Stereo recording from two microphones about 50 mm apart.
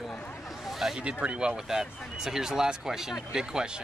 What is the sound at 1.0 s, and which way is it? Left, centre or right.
Speech, right.